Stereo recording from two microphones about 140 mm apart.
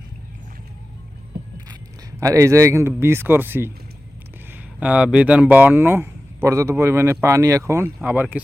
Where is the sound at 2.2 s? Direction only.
20° right (ahead or behind).